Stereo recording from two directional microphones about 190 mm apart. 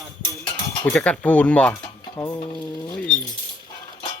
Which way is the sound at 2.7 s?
20° left (ahead or behind).